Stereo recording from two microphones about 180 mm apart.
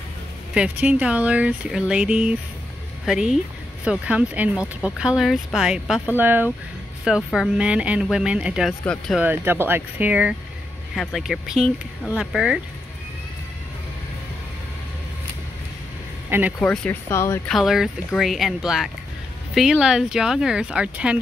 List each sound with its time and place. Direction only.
0.6 s speech: 10° right (ahead or behind)
9.2 s speech: 10° right (ahead or behind)
16.3 s speech: 10° right (ahead or behind)
16.5 s speech: 5° left (ahead or behind)
17.5 s speech: centre (ahead or behind)